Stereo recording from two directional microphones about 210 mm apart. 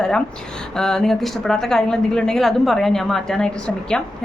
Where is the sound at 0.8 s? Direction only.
5° left (ahead or behind).